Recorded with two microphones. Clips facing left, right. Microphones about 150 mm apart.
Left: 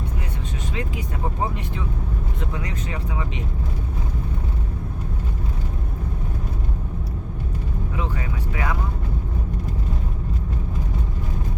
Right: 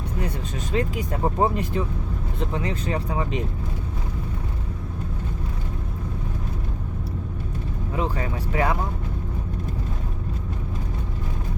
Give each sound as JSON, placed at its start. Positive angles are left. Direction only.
{"t": 0.7, "sound": "speech", "side_deg": -40}
{"t": 2.5, "sound": "speech", "side_deg": -30}
{"t": 7.9, "sound": "speech", "side_deg": -35}